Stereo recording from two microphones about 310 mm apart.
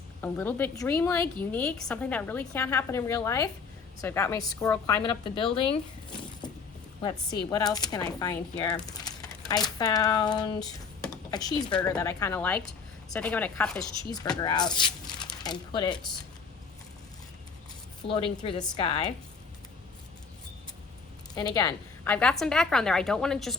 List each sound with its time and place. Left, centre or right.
0.2 s a woman's voice: centre
5.7 s a sound: centre
7.0 s a woman's voice: centre
14.4 s speech: centre
18.0 s a woman's voice: centre
21.3 s a woman's voice: centre